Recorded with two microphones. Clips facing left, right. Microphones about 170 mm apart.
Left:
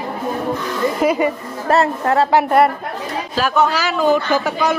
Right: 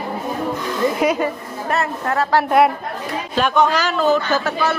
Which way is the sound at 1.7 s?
30° left (ahead or behind).